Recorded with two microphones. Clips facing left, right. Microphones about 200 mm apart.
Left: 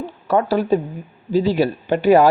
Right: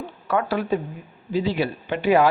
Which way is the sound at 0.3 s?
35° left (ahead or behind).